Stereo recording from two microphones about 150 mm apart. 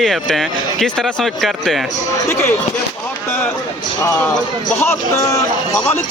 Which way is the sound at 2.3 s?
15° left (ahead or behind).